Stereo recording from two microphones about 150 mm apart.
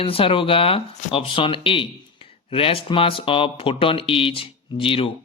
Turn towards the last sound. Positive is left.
turn(degrees=35)  # may be behind; listen again after turning